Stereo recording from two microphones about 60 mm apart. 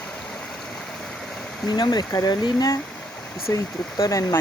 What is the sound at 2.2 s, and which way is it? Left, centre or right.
Speech, left.